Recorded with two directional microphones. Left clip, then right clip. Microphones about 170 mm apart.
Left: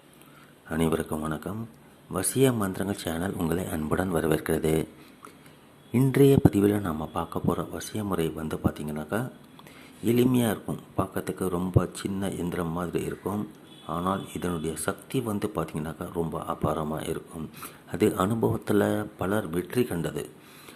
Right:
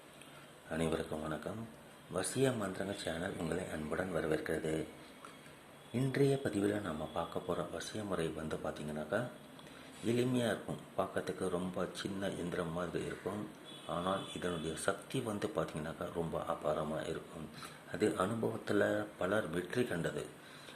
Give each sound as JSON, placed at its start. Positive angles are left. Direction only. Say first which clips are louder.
{"t": 0.7, "sound": "speech", "louder": "left 9 dB", "side_deg": 30}
{"t": 5.9, "sound": "speech", "louder": "left 12 dB", "side_deg": 30}